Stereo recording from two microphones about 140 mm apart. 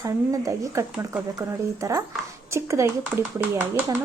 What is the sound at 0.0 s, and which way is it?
Speech, 25° right (ahead or behind).